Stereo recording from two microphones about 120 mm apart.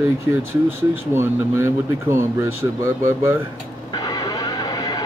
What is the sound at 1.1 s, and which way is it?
Speech, 20° right (ahead or behind).